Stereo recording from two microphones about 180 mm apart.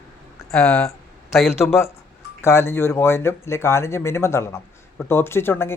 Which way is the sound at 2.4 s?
15° left (ahead or behind).